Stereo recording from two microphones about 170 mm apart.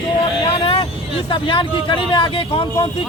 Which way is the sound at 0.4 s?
35° left (ahead or behind).